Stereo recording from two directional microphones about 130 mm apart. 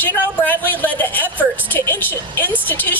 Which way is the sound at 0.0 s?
15° left (ahead or behind).